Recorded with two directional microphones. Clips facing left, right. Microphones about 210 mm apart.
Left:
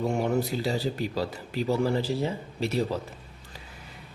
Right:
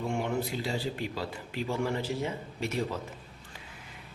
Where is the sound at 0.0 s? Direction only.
40° left (ahead or behind).